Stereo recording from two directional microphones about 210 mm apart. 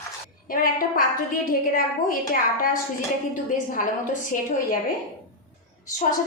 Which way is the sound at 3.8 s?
40° left (ahead or behind).